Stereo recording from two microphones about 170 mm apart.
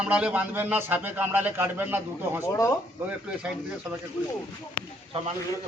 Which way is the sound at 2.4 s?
20° left (ahead or behind).